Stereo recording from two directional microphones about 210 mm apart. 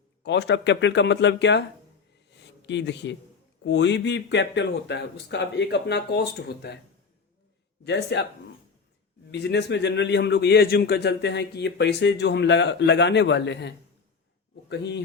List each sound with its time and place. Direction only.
0.2 s a man's voice: 55° left (ahead or behind)
2.3 s a sound: 55° left (ahead or behind)
3.6 s a man's voice: 55° left (ahead or behind)
7.9 s speech: 55° left (ahead or behind)
9.3 s a man's voice: 55° left (ahead or behind)